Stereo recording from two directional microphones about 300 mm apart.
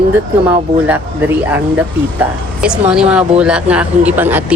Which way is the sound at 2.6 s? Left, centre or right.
Centre.